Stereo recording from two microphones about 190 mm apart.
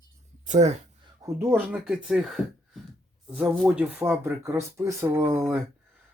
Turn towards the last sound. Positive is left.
turn(degrees=-10)  # may be behind; listen again after turning